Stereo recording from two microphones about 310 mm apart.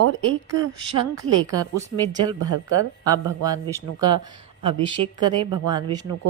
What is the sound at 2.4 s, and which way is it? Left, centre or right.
Speech, right.